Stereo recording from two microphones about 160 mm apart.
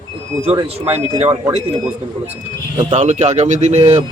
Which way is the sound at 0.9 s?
40° right (ahead or behind).